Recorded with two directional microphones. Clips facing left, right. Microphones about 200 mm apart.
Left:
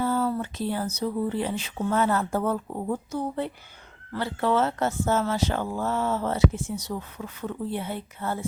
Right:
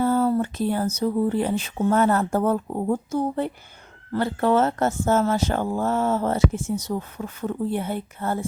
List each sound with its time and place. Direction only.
0.0 s speech: 45° right (ahead or behind)